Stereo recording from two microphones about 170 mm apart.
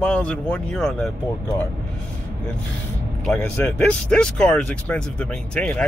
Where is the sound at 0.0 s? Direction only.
5° left (ahead or behind).